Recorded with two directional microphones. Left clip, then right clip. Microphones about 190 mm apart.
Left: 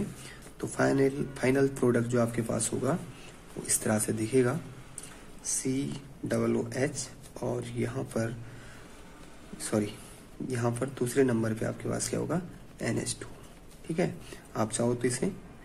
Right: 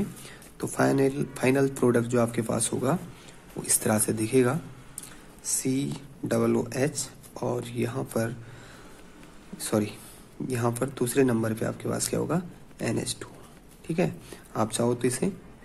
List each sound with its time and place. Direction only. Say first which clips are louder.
0.2 s speech: right 3 dB; 20° right (ahead or behind)
9.6 s speech: right 3 dB; 20° right (ahead or behind)